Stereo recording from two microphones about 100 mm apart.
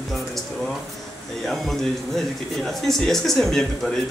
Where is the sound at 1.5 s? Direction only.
Centre (ahead or behind).